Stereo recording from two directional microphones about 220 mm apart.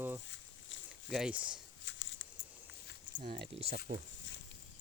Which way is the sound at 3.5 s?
25° right (ahead or behind).